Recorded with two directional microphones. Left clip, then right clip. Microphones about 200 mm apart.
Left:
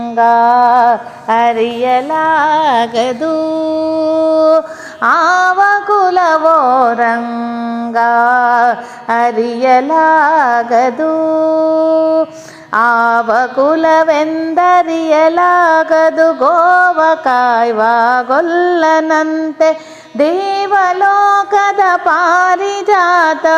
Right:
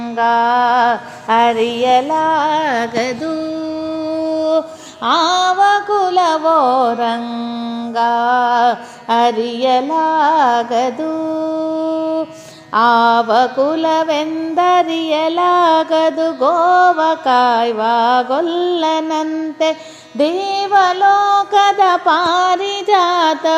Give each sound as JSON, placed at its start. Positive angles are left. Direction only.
{"t": 0.2, "sound": "a sound", "side_deg": 25}
{"t": 2.1, "sound": "music", "side_deg": 0}
{"t": 4.4, "sound": "mantra", "side_deg": 15}
{"t": 11.9, "sound": "mantra", "side_deg": 35}
{"t": 12.7, "sound": "mantra", "side_deg": 15}
{"t": 20.1, "sound": "mantra", "side_deg": 15}